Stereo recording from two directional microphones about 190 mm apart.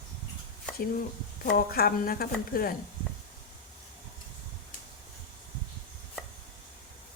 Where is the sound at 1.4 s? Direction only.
50° left (ahead or behind).